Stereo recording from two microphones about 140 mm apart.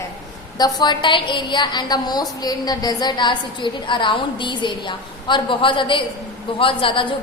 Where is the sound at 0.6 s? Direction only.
30° left (ahead or behind).